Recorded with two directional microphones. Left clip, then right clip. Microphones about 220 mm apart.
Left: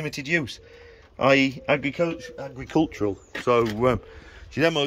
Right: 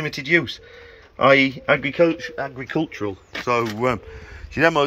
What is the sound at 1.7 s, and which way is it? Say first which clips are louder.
Speech: right 4 dB; 35° right (ahead or behind).